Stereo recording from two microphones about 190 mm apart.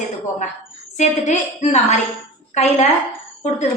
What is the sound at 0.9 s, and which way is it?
A woman's voice, 40° left (ahead or behind).